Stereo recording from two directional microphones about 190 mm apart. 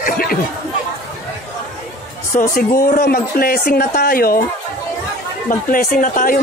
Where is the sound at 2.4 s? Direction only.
50° left (ahead or behind).